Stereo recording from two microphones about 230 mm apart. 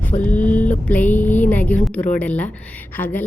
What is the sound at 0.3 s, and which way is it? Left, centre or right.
A woman's voice, centre.